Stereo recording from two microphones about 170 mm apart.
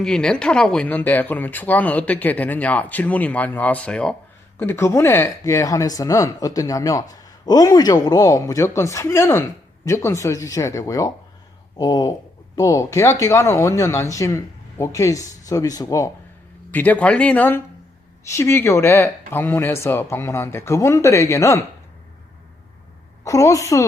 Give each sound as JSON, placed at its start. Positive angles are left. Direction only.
{"t": 0.0, "sound": "speech", "side_deg": 5}
{"t": 16.7, "sound": "speech", "side_deg": 10}
{"t": 23.2, "sound": "speech", "side_deg": 20}